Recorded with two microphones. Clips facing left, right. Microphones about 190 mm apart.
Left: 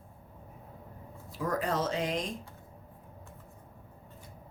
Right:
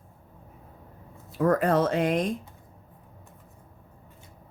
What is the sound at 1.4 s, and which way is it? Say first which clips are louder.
Speech: right 9 dB; 60° right (ahead or behind).